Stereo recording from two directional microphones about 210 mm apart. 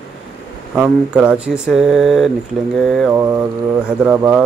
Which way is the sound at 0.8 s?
5° right (ahead or behind).